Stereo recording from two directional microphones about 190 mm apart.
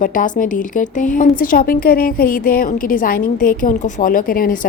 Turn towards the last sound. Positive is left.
turn(degrees=50)  # may be behind; listen again after turning